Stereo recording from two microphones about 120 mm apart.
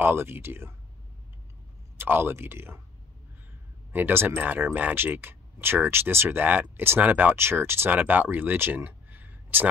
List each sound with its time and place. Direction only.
0.0 s speech: 20° right (ahead or behind)
2.0 s speech: 15° right (ahead or behind)
3.9 s speech: 15° right (ahead or behind)